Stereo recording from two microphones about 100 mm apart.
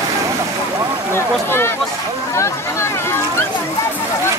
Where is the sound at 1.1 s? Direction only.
25° left (ahead or behind).